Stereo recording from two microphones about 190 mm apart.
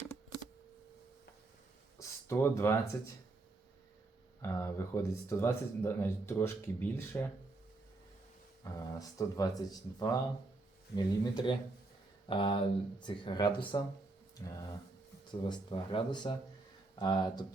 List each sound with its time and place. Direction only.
2.0 s speech: 15° left (ahead or behind)
4.4 s speech: 15° left (ahead or behind)
8.6 s speech: 15° left (ahead or behind)